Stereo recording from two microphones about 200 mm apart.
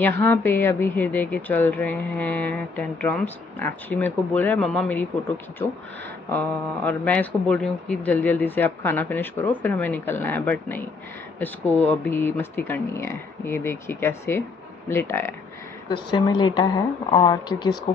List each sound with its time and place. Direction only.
0.2 s speech: 10° left (ahead or behind)
6.3 s speech: 10° left (ahead or behind)
15.9 s a woman's voice: 25° left (ahead or behind)